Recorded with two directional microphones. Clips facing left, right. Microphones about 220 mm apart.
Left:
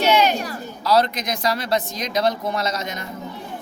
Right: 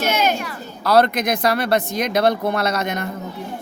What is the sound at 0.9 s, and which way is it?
Speech, 60° right (ahead or behind).